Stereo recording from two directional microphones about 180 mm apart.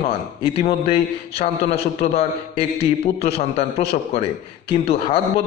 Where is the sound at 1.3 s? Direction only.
35° left (ahead or behind).